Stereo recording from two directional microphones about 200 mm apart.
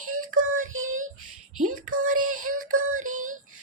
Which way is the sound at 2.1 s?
90° right.